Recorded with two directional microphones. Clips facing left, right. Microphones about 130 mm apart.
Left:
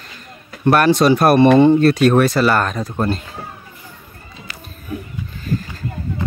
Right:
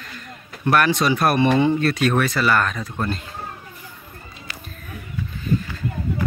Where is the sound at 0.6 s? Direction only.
35° left (ahead or behind).